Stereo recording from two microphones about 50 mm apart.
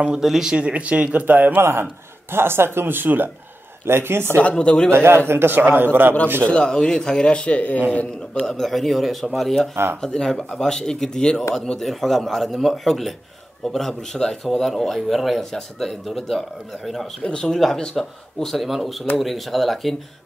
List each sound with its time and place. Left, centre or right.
0.2 s speech: centre
0.6 s speech: right
1.2 s a man's voice: right
1.6 s a man's voice: right
3.8 s a man's voice: right
4.4 s speech: left
4.9 s speech: right
6.4 s speech: centre
8.6 s a man's voice: centre
17.2 s a man's voice: centre